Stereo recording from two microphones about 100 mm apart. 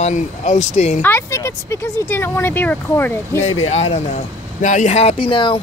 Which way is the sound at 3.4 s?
90° left.